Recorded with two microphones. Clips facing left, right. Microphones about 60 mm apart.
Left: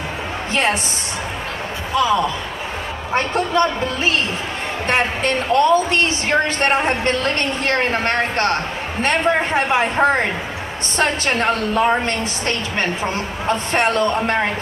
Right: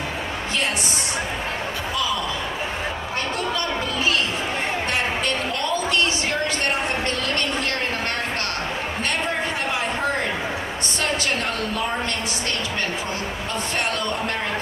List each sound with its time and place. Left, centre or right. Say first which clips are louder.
2.0 s a woman's voice: left 10 dB; left